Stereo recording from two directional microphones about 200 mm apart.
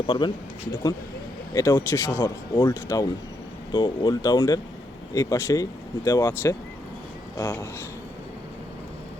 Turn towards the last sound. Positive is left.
turn(degrees=10)  # may be behind; listen again after turning